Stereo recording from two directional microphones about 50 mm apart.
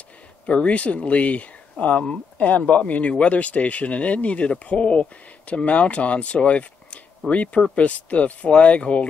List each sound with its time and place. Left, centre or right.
0.5 s speech: left